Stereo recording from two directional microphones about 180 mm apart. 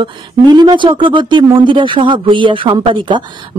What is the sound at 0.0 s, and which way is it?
Speech, 25° right (ahead or behind).